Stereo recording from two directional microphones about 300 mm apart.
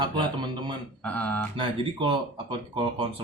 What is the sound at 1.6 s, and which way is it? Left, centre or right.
Speech, centre.